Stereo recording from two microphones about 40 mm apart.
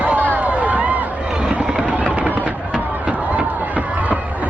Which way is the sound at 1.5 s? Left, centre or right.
Right.